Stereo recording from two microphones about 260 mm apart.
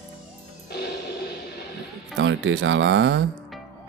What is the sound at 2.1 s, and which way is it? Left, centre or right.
Speech, right.